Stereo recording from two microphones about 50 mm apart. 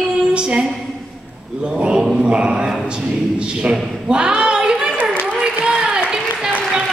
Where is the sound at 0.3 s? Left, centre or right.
Centre.